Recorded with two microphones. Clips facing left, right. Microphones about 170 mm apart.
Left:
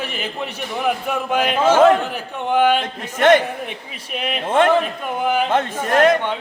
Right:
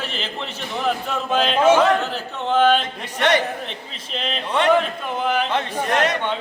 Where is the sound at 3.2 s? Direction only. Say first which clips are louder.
Left 6 dB; 50° left (ahead or behind).